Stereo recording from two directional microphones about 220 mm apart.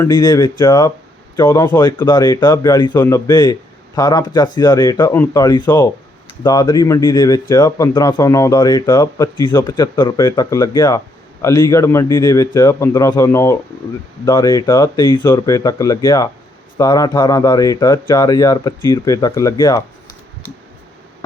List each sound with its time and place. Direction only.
0.0 s a man's voice: 20° left (ahead or behind)